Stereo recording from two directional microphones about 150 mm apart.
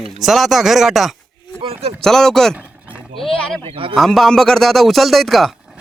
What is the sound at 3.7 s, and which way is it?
Speech, 40° right (ahead or behind).